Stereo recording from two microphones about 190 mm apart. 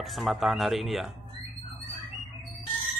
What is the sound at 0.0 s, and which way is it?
Speech, centre (ahead or behind).